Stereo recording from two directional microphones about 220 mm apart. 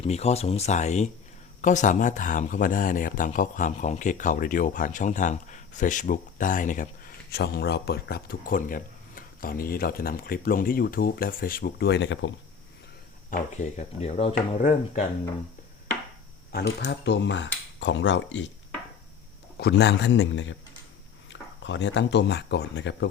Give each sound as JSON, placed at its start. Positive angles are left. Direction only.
{"t": 0.0, "sound": "speech", "side_deg": 30}
{"t": 13.3, "sound": "speech", "side_deg": 35}
{"t": 16.5, "sound": "speech", "side_deg": 45}
{"t": 19.5, "sound": "speech", "side_deg": 50}